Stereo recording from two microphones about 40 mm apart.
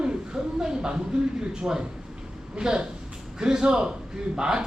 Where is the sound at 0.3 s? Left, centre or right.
Centre.